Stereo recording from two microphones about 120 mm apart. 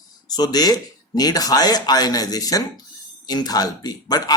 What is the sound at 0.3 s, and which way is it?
Speech, 35° left (ahead or behind).